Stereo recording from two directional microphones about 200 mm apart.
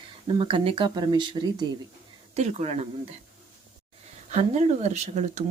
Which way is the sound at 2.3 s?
35° right (ahead or behind).